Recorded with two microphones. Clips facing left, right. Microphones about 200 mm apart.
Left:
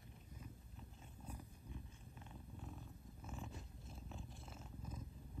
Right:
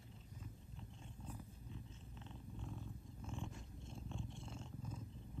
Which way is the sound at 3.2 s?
5° left (ahead or behind).